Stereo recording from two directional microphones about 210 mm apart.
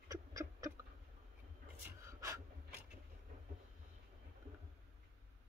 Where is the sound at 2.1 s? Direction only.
15° right (ahead or behind).